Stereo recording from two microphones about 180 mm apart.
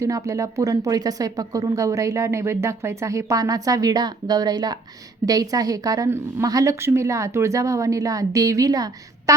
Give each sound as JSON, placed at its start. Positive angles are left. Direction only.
{"t": 0.0, "sound": "speech", "side_deg": -20}